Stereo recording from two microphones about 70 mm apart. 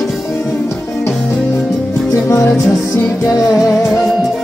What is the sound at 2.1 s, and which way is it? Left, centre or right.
Music, left.